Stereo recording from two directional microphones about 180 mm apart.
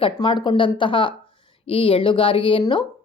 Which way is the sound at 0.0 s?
25° left (ahead or behind).